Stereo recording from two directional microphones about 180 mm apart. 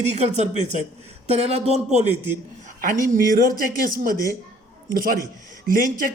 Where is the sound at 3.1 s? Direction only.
50° right (ahead or behind).